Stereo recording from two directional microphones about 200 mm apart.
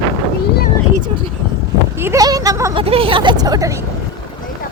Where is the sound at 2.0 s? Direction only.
15° right (ahead or behind).